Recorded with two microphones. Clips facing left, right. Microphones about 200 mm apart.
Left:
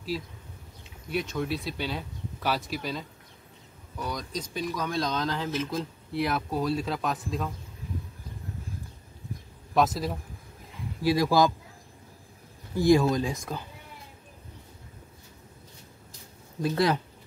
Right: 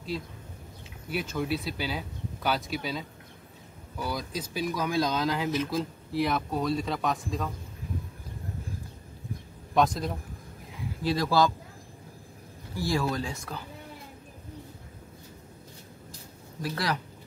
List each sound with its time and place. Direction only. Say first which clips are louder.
1.1 s speech: even; centre (ahead or behind)
9.8 s speech: even; 5° left (ahead or behind)
12.7 s speech: left 8 dB; 20° left (ahead or behind)
16.6 s speech: left 6 dB; 20° left (ahead or behind)